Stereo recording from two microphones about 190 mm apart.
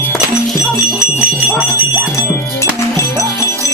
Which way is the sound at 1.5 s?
5° right (ahead or behind).